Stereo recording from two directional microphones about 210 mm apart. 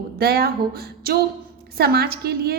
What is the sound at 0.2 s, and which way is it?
A woman's voice, 45° right (ahead or behind).